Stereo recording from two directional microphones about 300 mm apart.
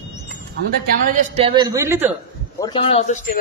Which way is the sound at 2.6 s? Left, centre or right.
Centre.